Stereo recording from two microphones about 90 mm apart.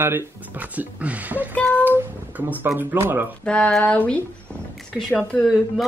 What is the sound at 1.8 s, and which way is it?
Speech, 20° right (ahead or behind).